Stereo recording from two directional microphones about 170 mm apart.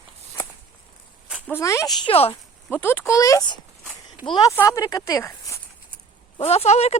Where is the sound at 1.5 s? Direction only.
15° left (ahead or behind).